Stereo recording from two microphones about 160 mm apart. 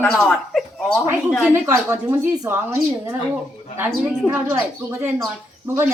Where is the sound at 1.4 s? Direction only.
15° right (ahead or behind).